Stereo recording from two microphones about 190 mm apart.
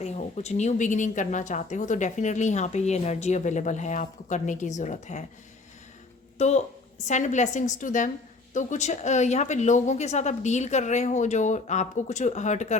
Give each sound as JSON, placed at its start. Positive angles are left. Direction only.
{"t": 0.0, "sound": "a woman's voice", "side_deg": 35}
{"t": 6.4, "sound": "a woman's voice", "side_deg": 35}